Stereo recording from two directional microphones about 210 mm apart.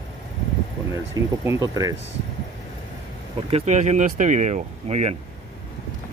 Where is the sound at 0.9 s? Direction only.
15° right (ahead or behind).